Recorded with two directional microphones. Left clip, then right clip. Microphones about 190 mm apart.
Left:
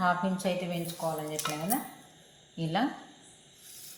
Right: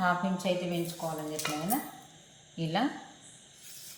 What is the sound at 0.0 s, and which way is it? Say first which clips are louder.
Speech: left 1 dB; 30° left (ahead or behind).